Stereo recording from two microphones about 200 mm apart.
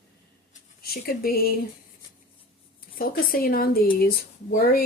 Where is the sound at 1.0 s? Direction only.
50° left (ahead or behind).